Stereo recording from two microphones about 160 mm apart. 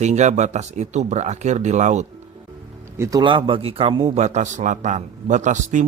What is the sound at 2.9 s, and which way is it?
Speech, 15° right (ahead or behind).